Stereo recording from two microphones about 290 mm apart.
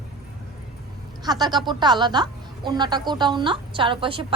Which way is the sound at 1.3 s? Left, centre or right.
Centre.